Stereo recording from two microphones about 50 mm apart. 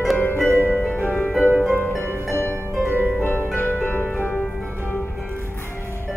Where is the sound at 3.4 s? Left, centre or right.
Left.